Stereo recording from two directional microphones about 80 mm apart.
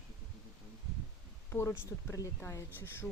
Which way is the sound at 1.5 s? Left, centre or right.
Left.